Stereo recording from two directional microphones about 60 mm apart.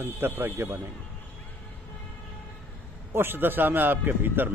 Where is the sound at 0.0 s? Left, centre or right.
Right.